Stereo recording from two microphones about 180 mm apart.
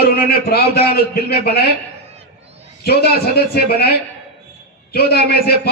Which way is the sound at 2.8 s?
60° left (ahead or behind).